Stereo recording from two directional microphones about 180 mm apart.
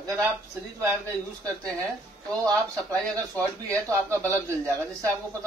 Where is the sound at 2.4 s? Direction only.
15° right (ahead or behind).